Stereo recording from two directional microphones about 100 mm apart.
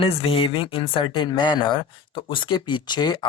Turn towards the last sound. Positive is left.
turn(degrees=50)  # may be behind; listen again after turning